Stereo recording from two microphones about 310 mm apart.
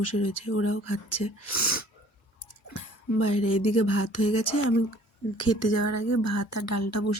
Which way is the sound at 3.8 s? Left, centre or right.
Left.